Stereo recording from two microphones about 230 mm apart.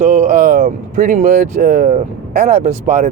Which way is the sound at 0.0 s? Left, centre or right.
Right.